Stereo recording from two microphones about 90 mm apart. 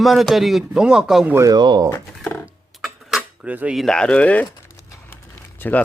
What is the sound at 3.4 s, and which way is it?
Speech, 15° right (ahead or behind).